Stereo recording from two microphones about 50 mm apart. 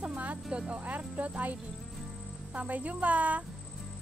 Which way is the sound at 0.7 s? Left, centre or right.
Right.